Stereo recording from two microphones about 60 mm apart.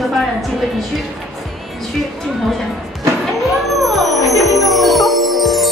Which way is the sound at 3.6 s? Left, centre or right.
Centre.